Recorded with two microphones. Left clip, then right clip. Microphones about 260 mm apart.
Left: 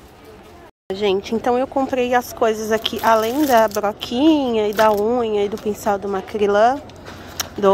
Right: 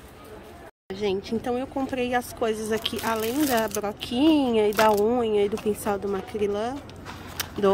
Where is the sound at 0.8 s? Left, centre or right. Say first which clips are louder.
Left 8 dB; centre.